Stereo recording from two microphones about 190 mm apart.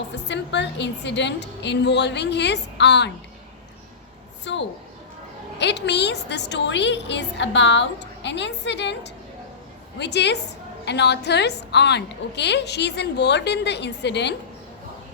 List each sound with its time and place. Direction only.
0.3 s a woman's voice: 70° left (ahead or behind)
4.5 s a woman's voice: 70° left (ahead or behind)